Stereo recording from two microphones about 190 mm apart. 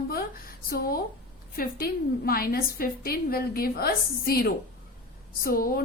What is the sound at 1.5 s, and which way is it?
A woman's voice, 50° left (ahead or behind).